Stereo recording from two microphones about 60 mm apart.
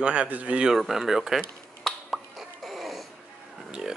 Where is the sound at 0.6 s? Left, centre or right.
Centre.